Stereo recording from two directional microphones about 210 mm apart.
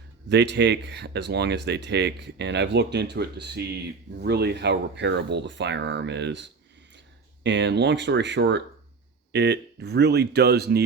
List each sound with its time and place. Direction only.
0.3 s speech: 55° right (ahead or behind)